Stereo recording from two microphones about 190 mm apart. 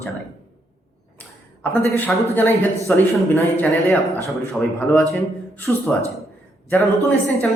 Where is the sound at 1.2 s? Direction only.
5° left (ahead or behind).